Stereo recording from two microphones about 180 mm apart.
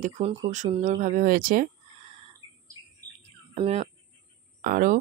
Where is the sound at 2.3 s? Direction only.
20° right (ahead or behind).